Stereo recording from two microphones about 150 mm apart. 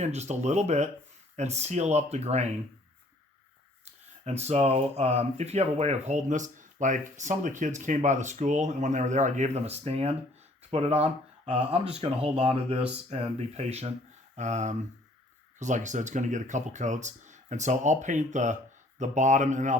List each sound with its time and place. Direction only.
0.0 s speech: 50° right (ahead or behind)
3.8 s speech: 45° right (ahead or behind)